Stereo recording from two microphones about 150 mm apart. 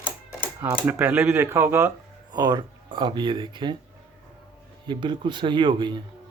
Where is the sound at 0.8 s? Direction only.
10° right (ahead or behind).